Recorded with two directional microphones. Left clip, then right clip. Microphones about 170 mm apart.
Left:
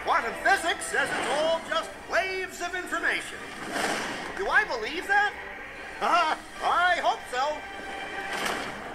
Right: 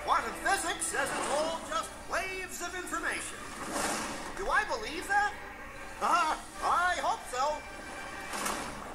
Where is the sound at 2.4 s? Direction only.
25° left (ahead or behind).